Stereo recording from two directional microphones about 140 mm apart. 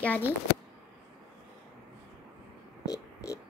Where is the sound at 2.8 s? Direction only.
25° left (ahead or behind).